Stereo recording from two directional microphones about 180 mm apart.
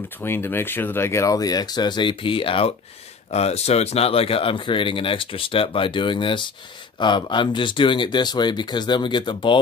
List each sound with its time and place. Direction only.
0.2 s speech: 10° left (ahead or behind)